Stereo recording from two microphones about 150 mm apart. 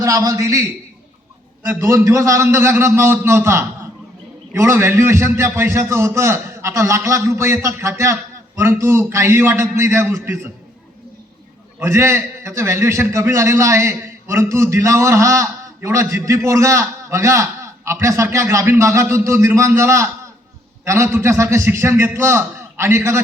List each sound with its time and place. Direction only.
0.0 s a man's voice: 20° right (ahead or behind)
11.9 s a man's voice: 20° right (ahead or behind)